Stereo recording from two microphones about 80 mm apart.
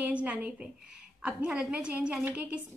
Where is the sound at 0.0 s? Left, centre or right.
Centre.